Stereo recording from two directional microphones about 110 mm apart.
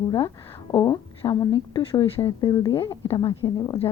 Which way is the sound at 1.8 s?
55° left (ahead or behind).